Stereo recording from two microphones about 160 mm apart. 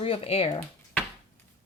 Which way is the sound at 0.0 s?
35° left (ahead or behind).